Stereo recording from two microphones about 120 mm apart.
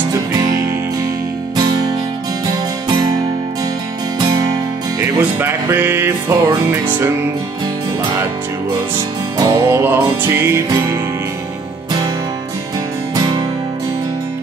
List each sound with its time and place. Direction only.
2.4 s music: 35° right (ahead or behind)
5.4 s music: 20° right (ahead or behind)
9.4 s music: 25° right (ahead or behind)
13.1 s music: 35° right (ahead or behind)